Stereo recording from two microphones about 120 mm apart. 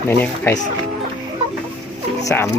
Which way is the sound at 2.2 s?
25° left (ahead or behind).